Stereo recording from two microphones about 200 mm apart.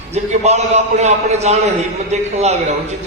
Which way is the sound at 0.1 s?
35° right (ahead or behind).